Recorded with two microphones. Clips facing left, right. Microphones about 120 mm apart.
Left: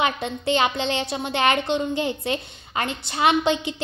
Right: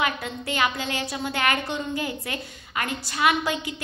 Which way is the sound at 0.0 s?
25° left (ahead or behind).